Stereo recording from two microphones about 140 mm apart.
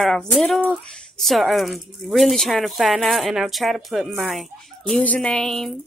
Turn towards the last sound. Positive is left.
turn(degrees=0)  # may be behind; listen again after turning